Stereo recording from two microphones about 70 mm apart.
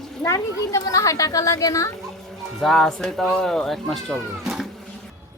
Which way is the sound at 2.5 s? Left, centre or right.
Centre.